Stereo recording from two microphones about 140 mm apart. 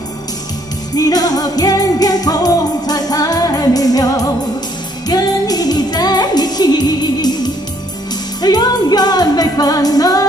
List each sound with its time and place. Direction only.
0.9 s music: 25° left (ahead or behind)